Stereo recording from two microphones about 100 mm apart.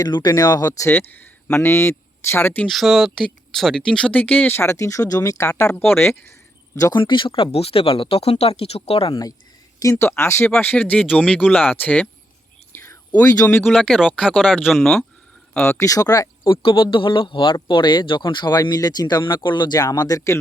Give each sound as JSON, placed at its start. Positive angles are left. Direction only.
{"t": 0.0, "sound": "speech", "side_deg": 45}
{"t": 0.9, "sound": "speech", "side_deg": 20}
{"t": 2.6, "sound": "speech", "side_deg": 0}
{"t": 5.7, "sound": "speech", "side_deg": 20}
{"t": 6.9, "sound": "speech", "side_deg": 55}
{"t": 9.8, "sound": "speech", "side_deg": 25}
{"t": 10.5, "sound": "speech", "side_deg": 10}
{"t": 12.7, "sound": "whispering", "side_deg": 25}
{"t": 13.2, "sound": "speech", "side_deg": 35}
{"t": 13.9, "sound": "speech", "side_deg": -5}
{"t": 15.8, "sound": "speech", "side_deg": 35}
{"t": 16.4, "sound": "speech", "side_deg": 55}